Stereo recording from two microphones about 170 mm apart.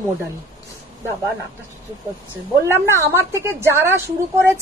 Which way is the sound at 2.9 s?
15° right (ahead or behind).